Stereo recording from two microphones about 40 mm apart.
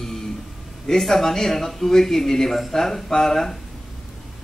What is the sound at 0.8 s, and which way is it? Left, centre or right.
A man's voice, centre.